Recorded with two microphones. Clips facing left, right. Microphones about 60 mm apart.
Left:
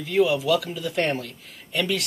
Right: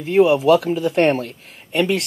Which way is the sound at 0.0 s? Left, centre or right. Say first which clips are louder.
Right 7 dB; right.